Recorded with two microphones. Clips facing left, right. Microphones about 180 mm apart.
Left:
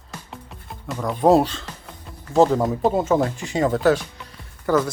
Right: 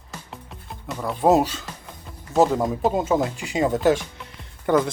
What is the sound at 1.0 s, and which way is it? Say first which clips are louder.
Speech: left 2 dB; 5° right (ahead or behind).